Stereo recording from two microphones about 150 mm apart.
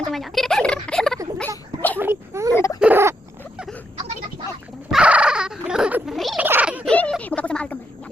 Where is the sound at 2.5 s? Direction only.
15° left (ahead or behind).